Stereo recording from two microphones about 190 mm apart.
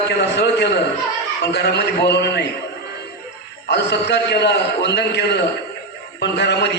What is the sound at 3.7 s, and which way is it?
A man's voice, 65° left (ahead or behind).